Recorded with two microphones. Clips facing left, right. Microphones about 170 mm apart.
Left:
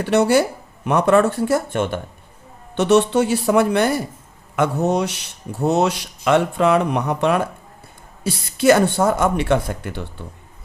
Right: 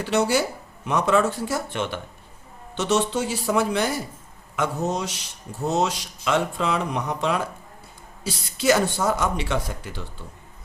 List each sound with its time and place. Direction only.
0.0 s speech: 55° left (ahead or behind)